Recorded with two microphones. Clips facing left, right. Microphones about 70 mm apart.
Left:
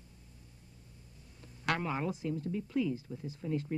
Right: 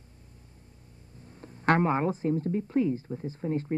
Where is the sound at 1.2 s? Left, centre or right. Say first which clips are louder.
Right 9 dB; right.